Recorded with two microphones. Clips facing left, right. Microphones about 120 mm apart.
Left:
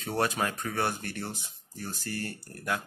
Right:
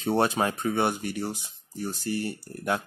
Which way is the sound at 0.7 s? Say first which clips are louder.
Right 5 dB; 15° right (ahead or behind).